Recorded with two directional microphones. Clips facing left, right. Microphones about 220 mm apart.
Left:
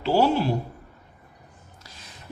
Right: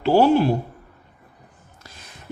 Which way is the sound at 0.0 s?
55° right (ahead or behind).